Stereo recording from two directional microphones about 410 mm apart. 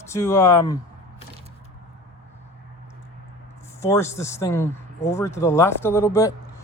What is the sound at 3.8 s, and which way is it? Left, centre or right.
Speech, centre.